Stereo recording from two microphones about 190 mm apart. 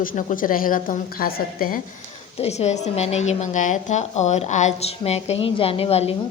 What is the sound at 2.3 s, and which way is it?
A woman's voice, 35° left (ahead or behind).